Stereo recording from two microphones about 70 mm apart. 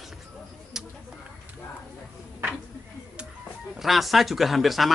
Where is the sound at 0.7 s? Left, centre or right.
Centre.